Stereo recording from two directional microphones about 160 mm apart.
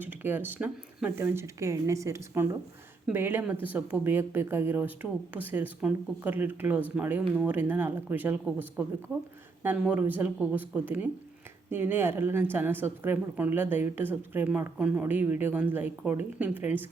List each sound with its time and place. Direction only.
0.0 s speech: 10° right (ahead or behind)
9.6 s speech: 10° right (ahead or behind)